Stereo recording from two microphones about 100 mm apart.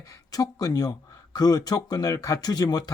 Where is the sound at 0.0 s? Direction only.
35° left (ahead or behind).